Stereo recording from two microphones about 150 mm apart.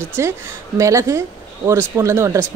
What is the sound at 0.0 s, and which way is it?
Speech, 15° right (ahead or behind).